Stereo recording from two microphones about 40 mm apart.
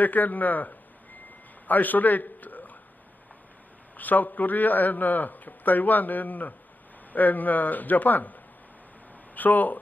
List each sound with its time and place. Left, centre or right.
0.0 s a man's voice: left
3.9 s a man's voice: left